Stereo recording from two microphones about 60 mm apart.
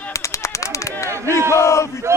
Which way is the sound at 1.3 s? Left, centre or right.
Right.